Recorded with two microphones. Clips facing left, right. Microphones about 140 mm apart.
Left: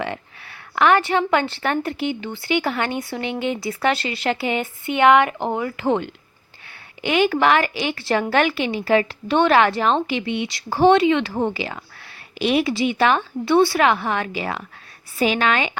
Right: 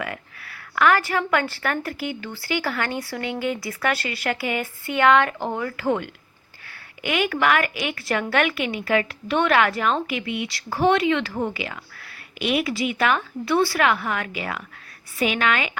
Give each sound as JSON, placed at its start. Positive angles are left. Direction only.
{"t": 0.0, "sound": "a woman's voice", "side_deg": 25}